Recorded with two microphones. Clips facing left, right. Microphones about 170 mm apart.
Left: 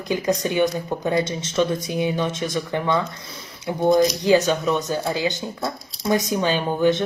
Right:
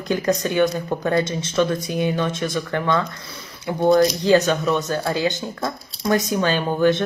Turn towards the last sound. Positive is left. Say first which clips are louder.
# right 1 dB
turn(degrees=15)  # may be behind; listen again after turning